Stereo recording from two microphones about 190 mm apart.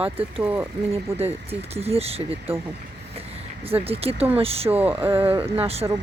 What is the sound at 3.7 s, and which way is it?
Speech, 30° right (ahead or behind).